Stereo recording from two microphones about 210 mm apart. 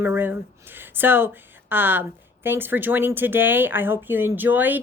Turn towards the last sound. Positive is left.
turn(degrees=-10)  # may be behind; listen again after turning